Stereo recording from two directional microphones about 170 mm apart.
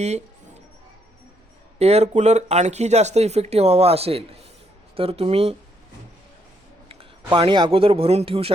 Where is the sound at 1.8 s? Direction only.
40° right (ahead or behind).